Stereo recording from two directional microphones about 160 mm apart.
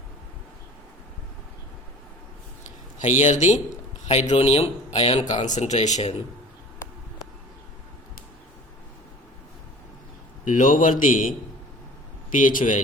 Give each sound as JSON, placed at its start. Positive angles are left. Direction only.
{"t": 3.0, "sound": "a man's voice", "side_deg": 45}
{"t": 10.4, "sound": "a man's voice", "side_deg": 55}